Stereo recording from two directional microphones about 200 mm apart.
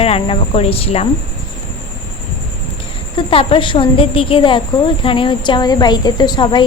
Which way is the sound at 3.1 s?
25° left (ahead or behind).